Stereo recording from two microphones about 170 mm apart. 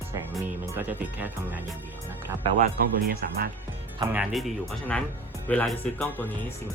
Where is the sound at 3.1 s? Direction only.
65° right (ahead or behind).